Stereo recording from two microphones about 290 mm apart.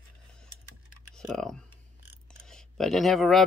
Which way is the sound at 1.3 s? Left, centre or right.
Centre.